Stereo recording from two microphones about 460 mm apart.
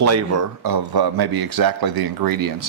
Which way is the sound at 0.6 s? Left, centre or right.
Right.